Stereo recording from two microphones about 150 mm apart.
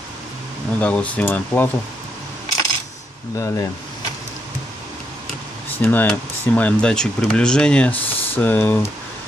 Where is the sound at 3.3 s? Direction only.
20° left (ahead or behind).